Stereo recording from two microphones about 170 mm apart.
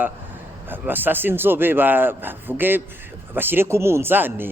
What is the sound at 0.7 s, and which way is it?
A man's voice, 10° right (ahead or behind).